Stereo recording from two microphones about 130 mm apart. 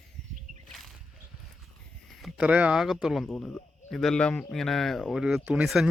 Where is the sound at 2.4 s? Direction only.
10° right (ahead or behind).